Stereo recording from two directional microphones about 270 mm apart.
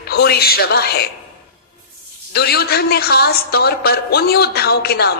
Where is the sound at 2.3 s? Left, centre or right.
Left.